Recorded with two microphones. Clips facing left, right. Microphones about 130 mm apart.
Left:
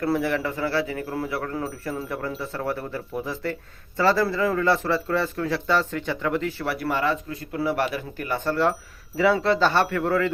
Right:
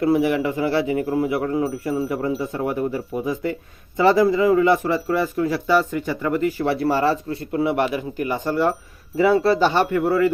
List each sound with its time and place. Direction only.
0.0 s speech: 15° right (ahead or behind)
6.7 s speech: 30° right (ahead or behind); by 10.3 s 10° right (ahead or behind)